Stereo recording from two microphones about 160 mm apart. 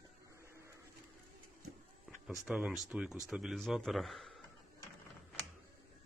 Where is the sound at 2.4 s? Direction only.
5° right (ahead or behind).